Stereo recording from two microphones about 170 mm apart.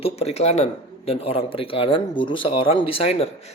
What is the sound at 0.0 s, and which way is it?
Speech, 40° left (ahead or behind).